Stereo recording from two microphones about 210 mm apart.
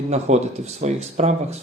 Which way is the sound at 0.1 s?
30° right (ahead or behind).